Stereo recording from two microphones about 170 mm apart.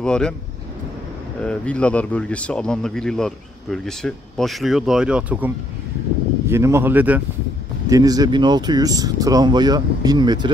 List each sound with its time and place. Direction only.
0.0 s speech: 5° left (ahead or behind)
1.4 s speech: 5° left (ahead or behind)
6.5 s speech: 15° right (ahead or behind)
7.9 s speech: 20° right (ahead or behind)